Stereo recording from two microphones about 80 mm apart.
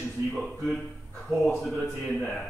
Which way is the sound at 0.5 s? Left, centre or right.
Centre.